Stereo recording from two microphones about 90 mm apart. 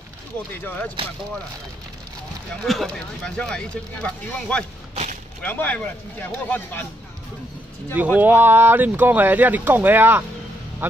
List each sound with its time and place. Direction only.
0.6 s speech: 20° left (ahead or behind)
2.6 s speech: centre (ahead or behind); by 6.9 s 20° left (ahead or behind)
7.9 s speech: 20° right (ahead or behind)